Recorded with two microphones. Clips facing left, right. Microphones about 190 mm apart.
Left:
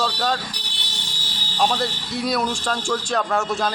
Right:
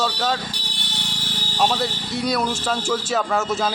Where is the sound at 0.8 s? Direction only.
65° right (ahead or behind).